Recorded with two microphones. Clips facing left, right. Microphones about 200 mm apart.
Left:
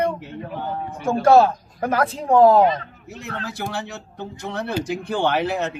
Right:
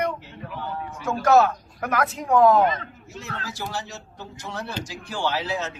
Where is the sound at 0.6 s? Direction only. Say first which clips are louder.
Left 3 dB; 55° left (ahead or behind).